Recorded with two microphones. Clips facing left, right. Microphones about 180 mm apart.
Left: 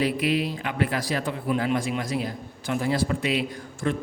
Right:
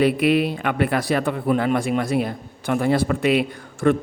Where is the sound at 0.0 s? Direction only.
60° right (ahead or behind).